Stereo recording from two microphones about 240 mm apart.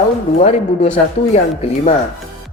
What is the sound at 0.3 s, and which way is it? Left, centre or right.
Speech, left.